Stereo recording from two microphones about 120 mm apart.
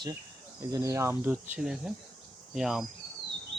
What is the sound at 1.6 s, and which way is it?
Cricket, 5° right (ahead or behind).